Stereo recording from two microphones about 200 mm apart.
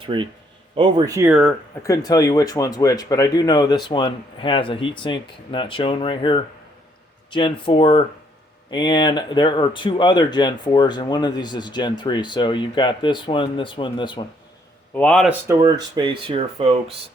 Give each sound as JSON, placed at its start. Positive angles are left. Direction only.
{"t": 0.0, "sound": "speech", "side_deg": -25}
{"t": 1.3, "sound": "speech", "side_deg": 0}
{"t": 1.8, "sound": "speech", "side_deg": 15}
{"t": 14.9, "sound": "speech", "side_deg": 5}
{"t": 15.4, "sound": "speech", "side_deg": -20}